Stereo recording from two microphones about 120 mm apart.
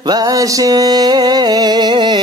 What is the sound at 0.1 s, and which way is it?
Music, 30° right (ahead or behind).